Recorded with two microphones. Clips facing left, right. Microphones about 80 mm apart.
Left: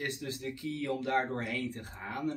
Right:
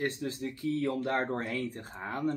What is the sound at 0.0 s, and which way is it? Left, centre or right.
Speech, right.